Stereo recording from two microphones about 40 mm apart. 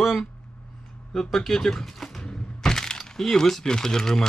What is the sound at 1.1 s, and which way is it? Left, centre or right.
Speech, centre.